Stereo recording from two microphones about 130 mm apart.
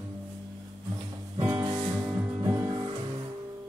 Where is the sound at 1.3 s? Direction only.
20° right (ahead or behind).